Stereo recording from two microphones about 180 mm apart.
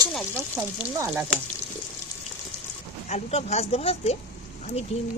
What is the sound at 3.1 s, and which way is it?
Speech, 35° left (ahead or behind).